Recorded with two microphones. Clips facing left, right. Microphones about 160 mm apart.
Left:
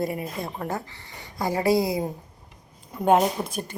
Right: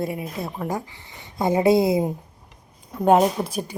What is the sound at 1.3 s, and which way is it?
Speech, 20° right (ahead or behind).